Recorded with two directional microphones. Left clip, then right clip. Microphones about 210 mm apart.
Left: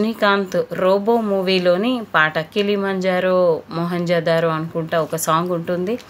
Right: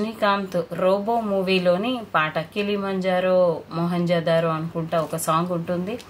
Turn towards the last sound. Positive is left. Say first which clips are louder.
# left 5 dB
turn(degrees=40)  # may be behind; listen again after turning